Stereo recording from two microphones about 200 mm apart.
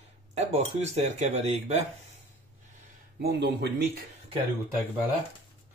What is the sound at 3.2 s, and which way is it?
Speech, 55° right (ahead or behind).